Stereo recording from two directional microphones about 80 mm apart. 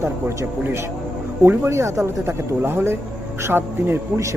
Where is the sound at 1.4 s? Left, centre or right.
Right.